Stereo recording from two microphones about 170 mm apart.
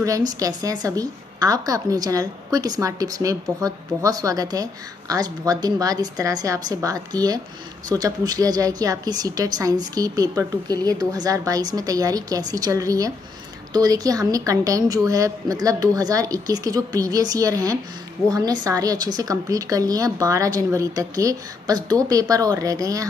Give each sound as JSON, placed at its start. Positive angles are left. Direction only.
{"t": 0.0, "sound": "a woman's voice", "side_deg": -20}